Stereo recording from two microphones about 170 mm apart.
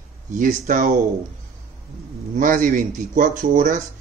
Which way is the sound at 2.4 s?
50° right (ahead or behind).